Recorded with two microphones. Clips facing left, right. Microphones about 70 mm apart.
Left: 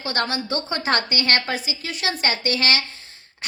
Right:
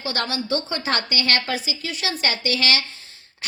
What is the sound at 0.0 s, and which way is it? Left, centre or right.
A woman's voice, left.